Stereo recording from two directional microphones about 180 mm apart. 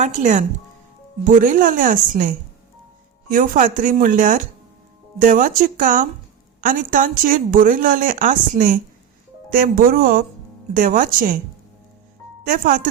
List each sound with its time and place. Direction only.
0.0 s speech: 40° right (ahead or behind)
12.5 s speech: 50° right (ahead or behind)